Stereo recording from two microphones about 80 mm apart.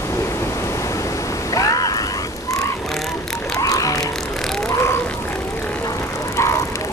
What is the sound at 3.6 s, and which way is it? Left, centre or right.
Vehicle, left.